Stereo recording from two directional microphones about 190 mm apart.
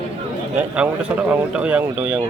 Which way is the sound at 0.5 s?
5° right (ahead or behind).